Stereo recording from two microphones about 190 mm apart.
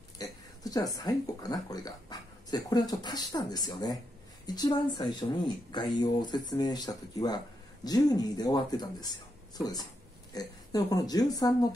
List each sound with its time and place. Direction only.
0.2 s speech: 20° left (ahead or behind)
10.3 s speech: 20° left (ahead or behind)